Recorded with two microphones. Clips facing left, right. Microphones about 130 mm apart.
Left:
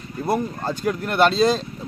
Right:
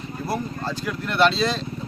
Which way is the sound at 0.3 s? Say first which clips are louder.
Left 5 dB; 45° left (ahead or behind).